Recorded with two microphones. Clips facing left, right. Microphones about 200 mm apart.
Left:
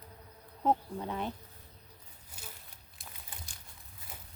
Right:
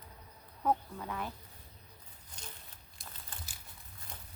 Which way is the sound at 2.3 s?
10° left (ahead or behind).